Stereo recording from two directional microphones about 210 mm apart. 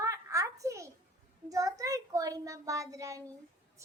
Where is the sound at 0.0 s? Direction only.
15° right (ahead or behind).